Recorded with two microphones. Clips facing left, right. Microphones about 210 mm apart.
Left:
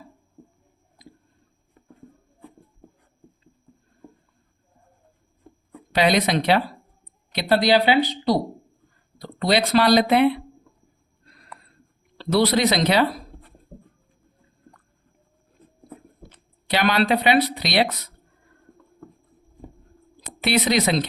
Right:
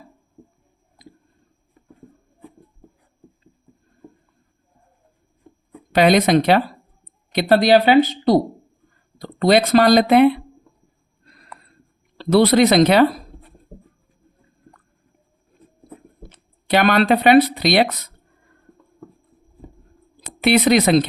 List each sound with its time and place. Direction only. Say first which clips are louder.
5.9 s speech: right 6 dB; 50° right (ahead or behind)
12.1 s speech: right 6 dB; 55° right (ahead or behind)
16.6 s speech: right 5 dB; 50° right (ahead or behind)
20.4 s speech: right 6 dB; 55° right (ahead or behind)